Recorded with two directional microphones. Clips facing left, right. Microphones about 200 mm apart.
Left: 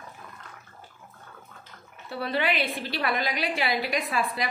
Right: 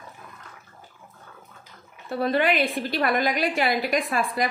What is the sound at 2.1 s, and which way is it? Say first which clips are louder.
A woman's voice: right 5 dB; 45° right (ahead or behind).